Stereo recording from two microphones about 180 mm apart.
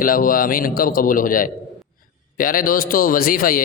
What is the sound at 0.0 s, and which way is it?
A man's voice, 50° left (ahead or behind).